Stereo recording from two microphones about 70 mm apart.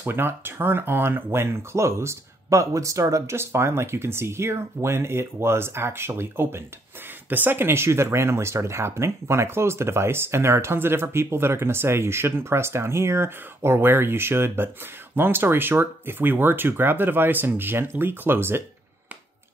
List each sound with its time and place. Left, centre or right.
0.0 s speech: right